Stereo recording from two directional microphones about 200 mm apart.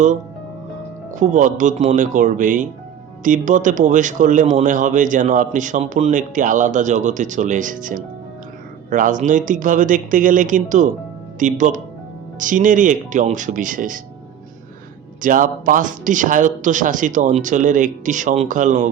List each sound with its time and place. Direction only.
1.1 s speech: 40° right (ahead or behind)
15.2 s speech: 40° right (ahead or behind)